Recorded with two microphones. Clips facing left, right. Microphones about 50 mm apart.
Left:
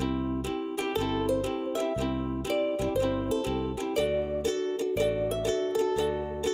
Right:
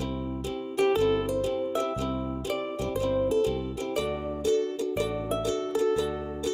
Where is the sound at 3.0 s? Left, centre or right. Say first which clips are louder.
Right 3 dB; left.